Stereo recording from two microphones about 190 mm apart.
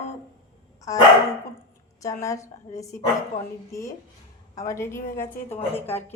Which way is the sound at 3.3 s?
40° left (ahead or behind).